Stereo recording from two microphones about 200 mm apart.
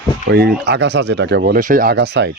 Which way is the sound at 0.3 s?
55° right (ahead or behind).